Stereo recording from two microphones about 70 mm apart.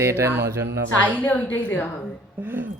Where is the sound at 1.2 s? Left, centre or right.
Left.